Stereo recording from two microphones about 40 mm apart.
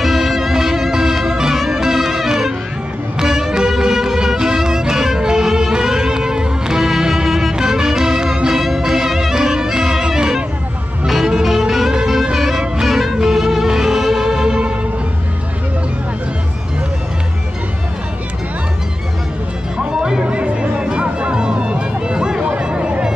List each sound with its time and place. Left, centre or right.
0.0 s music: centre
19.9 s music: centre
20.2 s music: right
22.4 s a sound: right